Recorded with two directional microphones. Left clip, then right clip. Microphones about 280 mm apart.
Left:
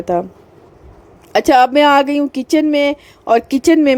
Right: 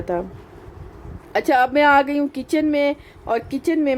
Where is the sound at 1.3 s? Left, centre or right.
Left.